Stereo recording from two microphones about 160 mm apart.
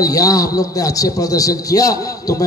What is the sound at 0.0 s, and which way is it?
A man's voice, 20° left (ahead or behind).